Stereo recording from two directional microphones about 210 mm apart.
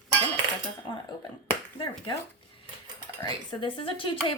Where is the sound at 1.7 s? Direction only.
20° left (ahead or behind).